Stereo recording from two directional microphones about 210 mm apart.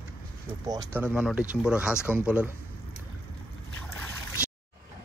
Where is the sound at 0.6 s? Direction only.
20° right (ahead or behind).